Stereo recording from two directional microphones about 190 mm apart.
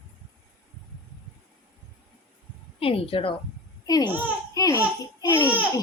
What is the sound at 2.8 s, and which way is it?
A woman's voice, 30° left (ahead or behind).